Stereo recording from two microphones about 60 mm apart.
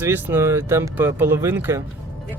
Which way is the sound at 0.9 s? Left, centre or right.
Right.